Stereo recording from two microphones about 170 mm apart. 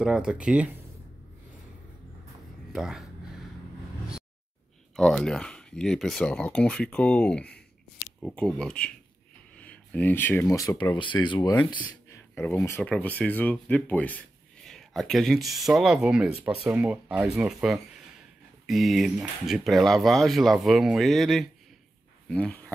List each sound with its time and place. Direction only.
0.0 s speech: 5° right (ahead or behind)
2.7 s a sound: centre (ahead or behind)
4.9 s speech: 5° left (ahead or behind); by 11.5 s 25° left (ahead or behind)
12.4 s speech: 15° left (ahead or behind)